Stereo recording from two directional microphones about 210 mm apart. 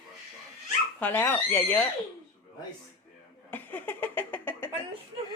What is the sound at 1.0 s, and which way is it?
Speech, 10° left (ahead or behind).